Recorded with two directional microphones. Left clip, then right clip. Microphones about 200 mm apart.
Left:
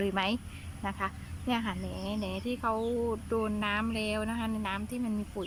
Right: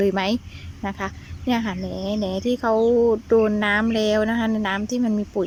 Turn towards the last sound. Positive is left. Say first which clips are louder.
# right 13 dB
turn(degrees=-35)  # may be behind; listen again after turning